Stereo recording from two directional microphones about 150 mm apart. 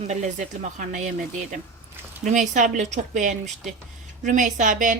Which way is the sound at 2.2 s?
55° right (ahead or behind).